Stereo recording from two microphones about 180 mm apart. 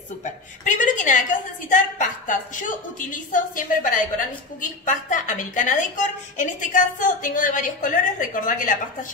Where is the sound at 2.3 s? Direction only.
45° left (ahead or behind).